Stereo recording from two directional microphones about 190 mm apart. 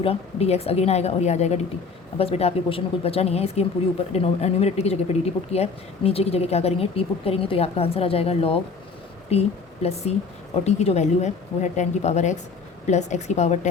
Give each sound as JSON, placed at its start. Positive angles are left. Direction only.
{"t": 0.0, "sound": "speech", "side_deg": 30}